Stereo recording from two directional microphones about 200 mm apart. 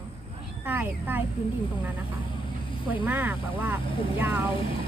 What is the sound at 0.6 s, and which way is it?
Speech, 10° right (ahead or behind).